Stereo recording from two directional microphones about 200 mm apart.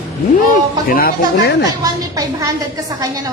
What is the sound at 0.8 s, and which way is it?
Speech, 45° left (ahead or behind).